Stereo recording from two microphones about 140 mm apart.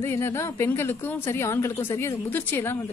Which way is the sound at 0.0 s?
15° left (ahead or behind).